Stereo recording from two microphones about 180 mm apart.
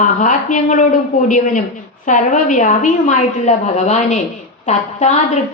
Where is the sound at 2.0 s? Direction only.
45° left (ahead or behind).